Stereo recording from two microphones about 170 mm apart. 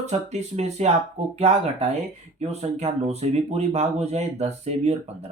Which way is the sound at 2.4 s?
40° right (ahead or behind).